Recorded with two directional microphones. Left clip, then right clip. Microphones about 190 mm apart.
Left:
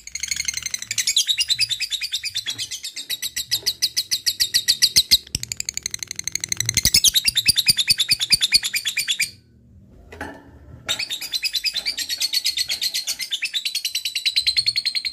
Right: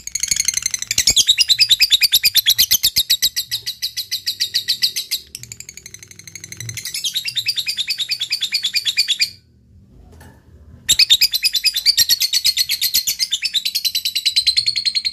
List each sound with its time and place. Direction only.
0.1 s bird: 25° right (ahead or behind)
3.6 s bird: 40° left (ahead or behind)
11.0 s bird: 35° right (ahead or behind)
13.3 s bird: 15° right (ahead or behind)